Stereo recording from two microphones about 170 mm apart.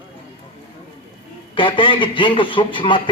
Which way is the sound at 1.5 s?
30° left (ahead or behind).